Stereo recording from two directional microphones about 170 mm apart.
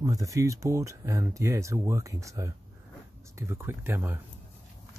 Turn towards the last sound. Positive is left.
turn(degrees=-15)  # may be behind; listen again after turning